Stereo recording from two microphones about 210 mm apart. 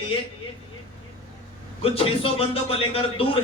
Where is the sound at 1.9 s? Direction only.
25° left (ahead or behind).